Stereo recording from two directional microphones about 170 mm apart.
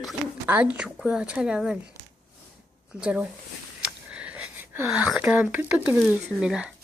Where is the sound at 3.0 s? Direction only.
5° right (ahead or behind).